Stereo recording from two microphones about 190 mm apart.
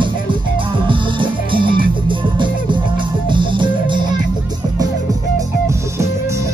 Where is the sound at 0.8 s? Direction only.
25° right (ahead or behind).